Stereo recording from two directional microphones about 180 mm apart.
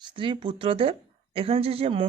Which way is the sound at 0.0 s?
25° right (ahead or behind).